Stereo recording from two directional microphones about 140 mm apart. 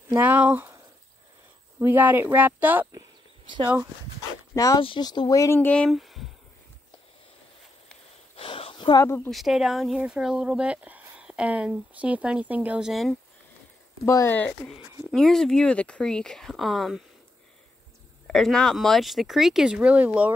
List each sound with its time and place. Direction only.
0.2 s speech: 10° right (ahead or behind)
1.8 s speech: 15° right (ahead or behind)
3.4 s speech: 35° right (ahead or behind)
4.6 s speech: 25° left (ahead or behind)
5.9 s speech: centre (ahead or behind)
8.4 s a sound: 40° left (ahead or behind)
9.0 s speech: 20° left (ahead or behind)
9.3 s speech: centre (ahead or behind)
14.0 s speech: 20° left (ahead or behind); by 17.0 s centre (ahead or behind)
18.2 s speech: 5° left (ahead or behind)